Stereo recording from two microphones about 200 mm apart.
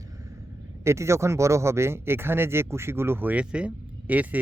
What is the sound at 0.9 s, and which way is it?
Speech, 15° right (ahead or behind).